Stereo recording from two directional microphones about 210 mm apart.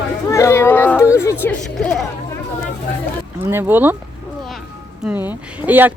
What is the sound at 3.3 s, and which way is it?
Speech, 10° right (ahead or behind).